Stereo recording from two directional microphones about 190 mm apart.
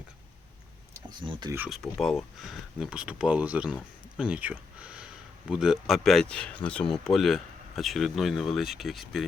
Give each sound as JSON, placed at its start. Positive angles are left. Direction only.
{"t": 1.2, "sound": "speech", "side_deg": -25}
{"t": 1.5, "sound": "speech", "side_deg": -5}